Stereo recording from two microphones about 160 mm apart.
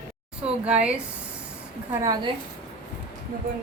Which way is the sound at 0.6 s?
5° right (ahead or behind).